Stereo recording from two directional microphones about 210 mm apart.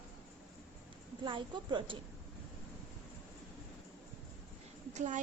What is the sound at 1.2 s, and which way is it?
Speech, 20° right (ahead or behind).